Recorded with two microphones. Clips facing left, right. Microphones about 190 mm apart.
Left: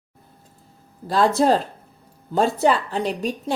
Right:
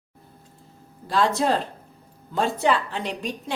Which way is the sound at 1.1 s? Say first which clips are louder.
Left 4 dB; 40° left (ahead or behind).